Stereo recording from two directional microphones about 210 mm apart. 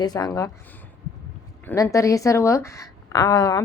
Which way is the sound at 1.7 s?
15° left (ahead or behind).